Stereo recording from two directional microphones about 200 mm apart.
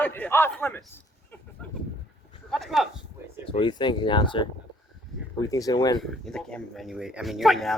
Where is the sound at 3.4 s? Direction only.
25° left (ahead or behind).